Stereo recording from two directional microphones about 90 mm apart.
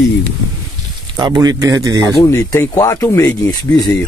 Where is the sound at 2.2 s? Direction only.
35° left (ahead or behind).